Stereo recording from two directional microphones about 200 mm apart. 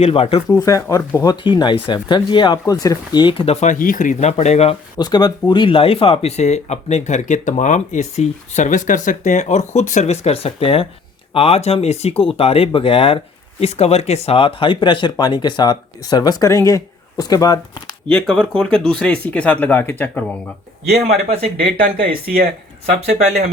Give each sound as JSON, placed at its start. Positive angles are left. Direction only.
{"t": 0.0, "sound": "speech", "side_deg": 30}
{"t": 0.4, "sound": "speech", "side_deg": 15}
{"t": 4.9, "sound": "speech", "side_deg": 20}
{"t": 18.1, "sound": "speech", "side_deg": 5}
{"t": 23.0, "sound": "speech", "side_deg": -35}